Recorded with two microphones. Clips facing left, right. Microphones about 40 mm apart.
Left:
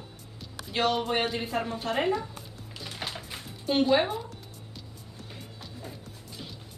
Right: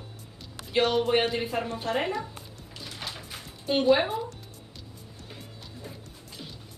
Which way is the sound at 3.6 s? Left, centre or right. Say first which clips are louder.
Right 1 dB; centre.